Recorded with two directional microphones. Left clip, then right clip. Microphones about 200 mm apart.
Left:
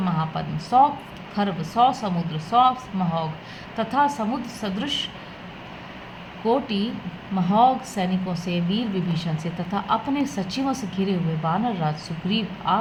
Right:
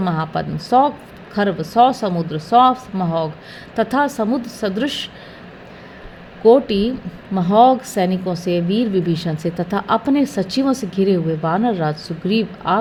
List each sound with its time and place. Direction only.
0.0 s a woman's voice: 40° right (ahead or behind)
6.4 s a woman's voice: 40° right (ahead or behind)